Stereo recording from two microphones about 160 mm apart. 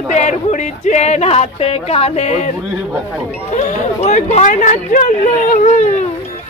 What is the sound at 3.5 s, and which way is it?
Speech, 45° left (ahead or behind).